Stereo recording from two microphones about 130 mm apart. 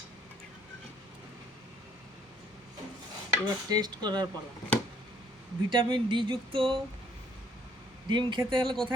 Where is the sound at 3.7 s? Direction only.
30° right (ahead or behind).